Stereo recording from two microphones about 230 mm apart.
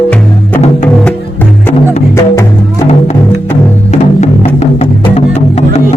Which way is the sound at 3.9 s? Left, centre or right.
Left.